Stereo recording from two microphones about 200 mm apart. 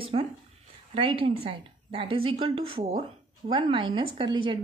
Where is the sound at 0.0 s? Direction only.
25° right (ahead or behind).